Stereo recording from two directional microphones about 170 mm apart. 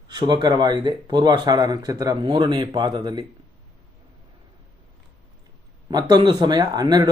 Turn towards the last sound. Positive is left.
turn(degrees=-25)  # may be behind; listen again after turning